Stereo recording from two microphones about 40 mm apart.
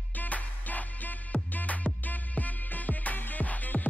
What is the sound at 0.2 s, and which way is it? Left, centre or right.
Music, left.